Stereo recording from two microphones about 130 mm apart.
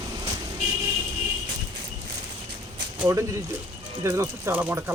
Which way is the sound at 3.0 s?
20° right (ahead or behind).